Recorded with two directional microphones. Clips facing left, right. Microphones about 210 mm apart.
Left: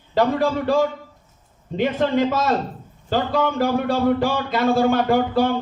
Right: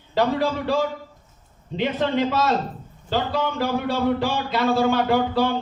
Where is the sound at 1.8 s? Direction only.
50° left (ahead or behind).